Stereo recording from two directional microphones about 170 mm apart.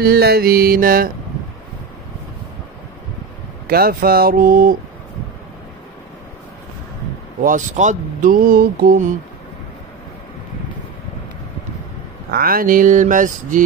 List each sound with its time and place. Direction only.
0.0 s speech: 65° right (ahead or behind)
3.6 s speech: 60° right (ahead or behind)
7.4 s speech: 45° right (ahead or behind)
12.3 s speech: 60° right (ahead or behind)